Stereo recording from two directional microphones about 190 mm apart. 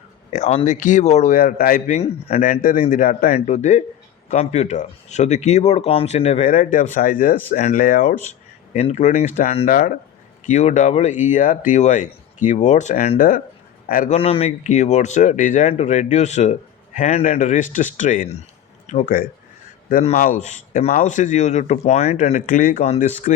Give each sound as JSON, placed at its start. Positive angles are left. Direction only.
{"t": 0.3, "sound": "speech", "side_deg": 40}
{"t": 2.0, "sound": "speech", "side_deg": 30}
{"t": 2.4, "sound": "speech", "side_deg": 45}
{"t": 14.2, "sound": "speech", "side_deg": 30}